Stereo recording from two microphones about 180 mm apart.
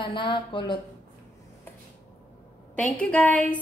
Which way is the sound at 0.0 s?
25° left (ahead or behind).